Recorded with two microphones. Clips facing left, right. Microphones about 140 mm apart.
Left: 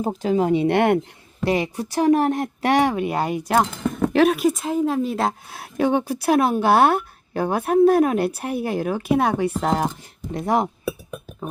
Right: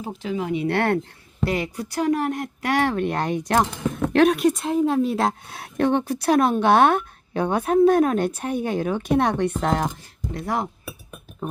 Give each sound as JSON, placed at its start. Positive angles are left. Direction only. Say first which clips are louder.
{"t": 0.0, "sound": "speech", "louder": "left 7 dB", "side_deg": 40}
{"t": 0.5, "sound": "speech", "louder": "left 1 dB", "side_deg": 25}
{"t": 2.8, "sound": "a woman's voice", "louder": "left 1 dB", "side_deg": 10}
{"t": 10.2, "sound": "speech", "louder": "left 5 dB", "side_deg": 25}